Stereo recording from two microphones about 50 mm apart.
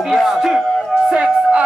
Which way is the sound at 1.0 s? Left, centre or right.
Centre.